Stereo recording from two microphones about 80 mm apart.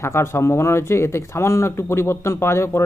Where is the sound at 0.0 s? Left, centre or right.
Left.